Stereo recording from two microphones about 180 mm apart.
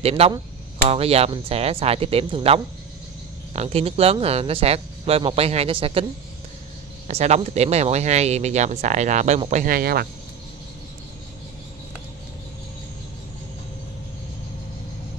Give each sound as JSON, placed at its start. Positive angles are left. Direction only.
{"t": 0.0, "sound": "speech", "side_deg": -35}
{"t": 7.1, "sound": "speech", "side_deg": -35}